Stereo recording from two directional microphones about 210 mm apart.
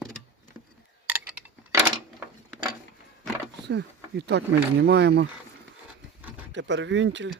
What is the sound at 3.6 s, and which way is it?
Speech, 55° right (ahead or behind).